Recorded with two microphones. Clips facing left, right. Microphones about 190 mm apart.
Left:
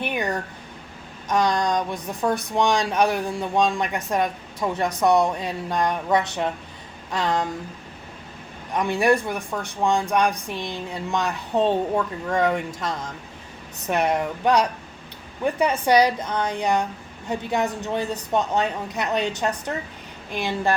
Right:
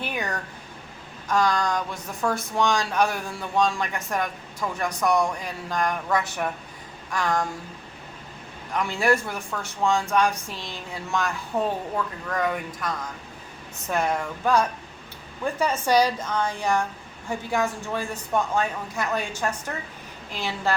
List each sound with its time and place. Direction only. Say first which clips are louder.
0.0 s a sound: left 4 dB; 15° left (ahead or behind)
1.3 s speech: left 2 dB; 20° left (ahead or behind)
8.7 s a woman's voice: left 3 dB; 20° left (ahead or behind)
15.7 s a woman's voice: left 2 dB; 60° left (ahead or behind)
16.0 s a woman's voice: left 2 dB; 15° left (ahead or behind)